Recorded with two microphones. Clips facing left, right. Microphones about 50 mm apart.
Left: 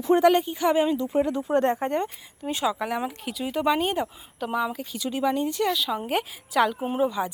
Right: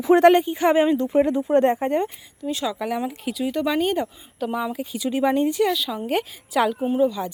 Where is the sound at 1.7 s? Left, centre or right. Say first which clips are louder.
Right 4 dB; centre.